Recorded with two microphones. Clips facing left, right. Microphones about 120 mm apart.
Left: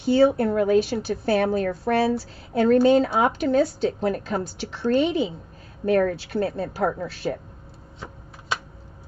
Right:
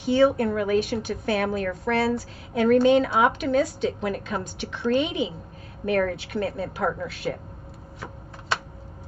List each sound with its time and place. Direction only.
0.1 s a woman's voice: 35° left (ahead or behind)